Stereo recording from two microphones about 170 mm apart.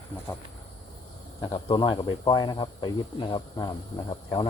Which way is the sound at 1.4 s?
25° left (ahead or behind).